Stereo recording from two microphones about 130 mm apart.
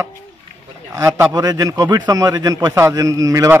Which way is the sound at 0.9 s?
25° right (ahead or behind).